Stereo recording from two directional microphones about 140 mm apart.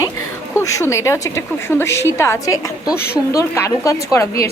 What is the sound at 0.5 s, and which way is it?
A woman's voice, 20° left (ahead or behind).